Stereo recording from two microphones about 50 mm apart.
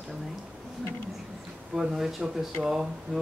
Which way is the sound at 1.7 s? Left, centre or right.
Centre.